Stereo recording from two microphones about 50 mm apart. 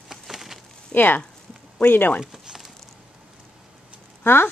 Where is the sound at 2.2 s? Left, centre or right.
Centre.